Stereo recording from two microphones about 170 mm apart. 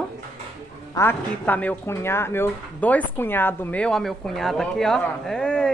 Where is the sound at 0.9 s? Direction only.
10° left (ahead or behind).